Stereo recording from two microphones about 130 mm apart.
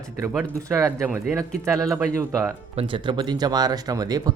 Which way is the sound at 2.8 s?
40° right (ahead or behind).